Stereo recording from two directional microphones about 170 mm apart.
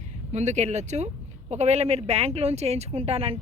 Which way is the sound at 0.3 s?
40° right (ahead or behind).